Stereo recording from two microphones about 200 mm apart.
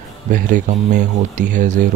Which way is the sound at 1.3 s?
40° right (ahead or behind).